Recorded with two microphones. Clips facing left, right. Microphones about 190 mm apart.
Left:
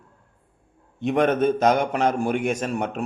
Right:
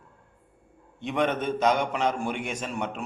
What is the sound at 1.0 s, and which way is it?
A man's voice, 45° left (ahead or behind).